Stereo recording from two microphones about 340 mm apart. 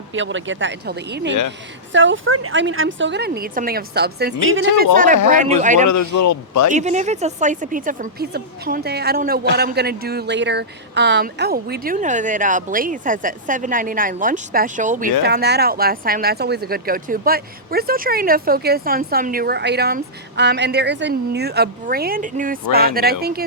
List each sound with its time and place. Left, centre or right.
0.1 s a woman's voice: right
5.3 s speech: right
5.8 s a man's voice: left
6.7 s speech: right